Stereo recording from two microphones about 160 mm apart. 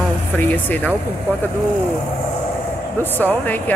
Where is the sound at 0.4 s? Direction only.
10° left (ahead or behind).